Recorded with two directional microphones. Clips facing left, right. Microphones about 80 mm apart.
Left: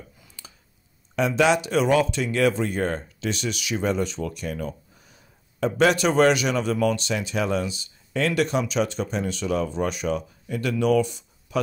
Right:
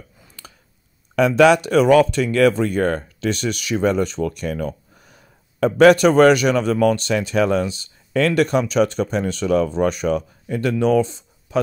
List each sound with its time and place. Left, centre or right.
1.1 s speech: right